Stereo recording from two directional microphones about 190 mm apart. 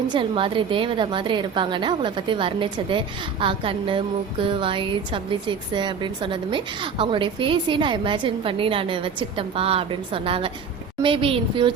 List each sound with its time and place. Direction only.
0.1 s a woman's voice: 25° right (ahead or behind)